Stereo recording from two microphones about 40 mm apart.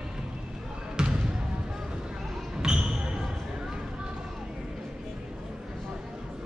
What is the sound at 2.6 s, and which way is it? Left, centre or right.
Basketball bounce, right.